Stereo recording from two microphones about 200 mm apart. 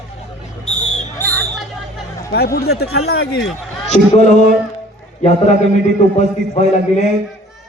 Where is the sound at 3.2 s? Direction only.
75° left (ahead or behind).